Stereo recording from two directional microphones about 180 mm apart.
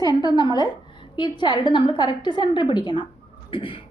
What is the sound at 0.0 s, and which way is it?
A woman's voice, 20° left (ahead or behind).